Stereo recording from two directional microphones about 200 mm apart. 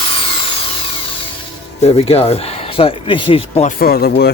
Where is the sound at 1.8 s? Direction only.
30° left (ahead or behind).